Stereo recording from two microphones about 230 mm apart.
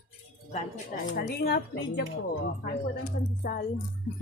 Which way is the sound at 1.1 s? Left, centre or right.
Left.